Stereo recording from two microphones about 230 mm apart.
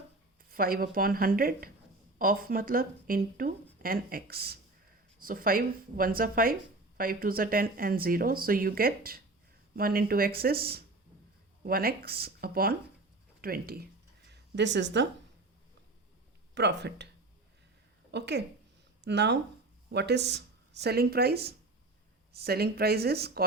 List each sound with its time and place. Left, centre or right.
0.5 s a woman's voice: right
14.3 s a sound: right
16.6 s speech: right
18.1 s speech: right